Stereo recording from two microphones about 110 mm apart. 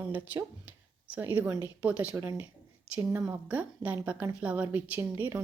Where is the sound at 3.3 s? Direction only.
15° right (ahead or behind).